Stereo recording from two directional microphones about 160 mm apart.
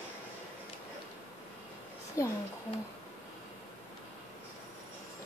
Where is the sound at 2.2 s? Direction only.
20° left (ahead or behind).